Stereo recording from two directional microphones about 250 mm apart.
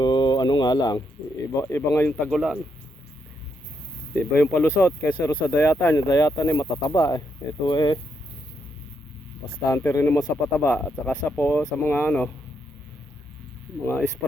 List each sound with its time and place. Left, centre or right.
0.0 s a sound: centre
0.6 s speech: centre
4.1 s speech: centre
9.6 s speech: centre